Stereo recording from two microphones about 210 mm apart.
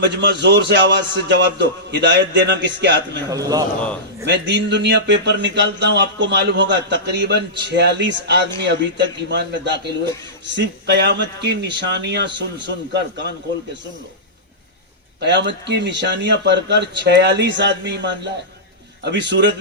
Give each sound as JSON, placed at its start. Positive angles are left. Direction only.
{"t": 0.0, "sound": "speech", "side_deg": -55}
{"t": 3.2, "sound": "a man's voice", "side_deg": -15}
{"t": 4.3, "sound": "a man's voice", "side_deg": -55}
{"t": 15.2, "sound": "speech", "side_deg": -55}